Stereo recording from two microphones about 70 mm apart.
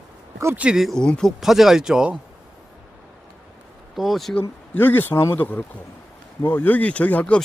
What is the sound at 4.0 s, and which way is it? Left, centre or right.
Speech, centre.